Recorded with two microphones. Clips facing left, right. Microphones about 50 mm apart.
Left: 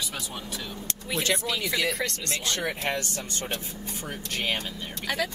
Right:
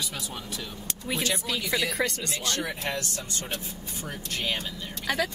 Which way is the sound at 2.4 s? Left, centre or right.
Left.